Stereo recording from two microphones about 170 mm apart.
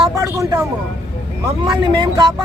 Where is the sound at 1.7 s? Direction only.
25° right (ahead or behind).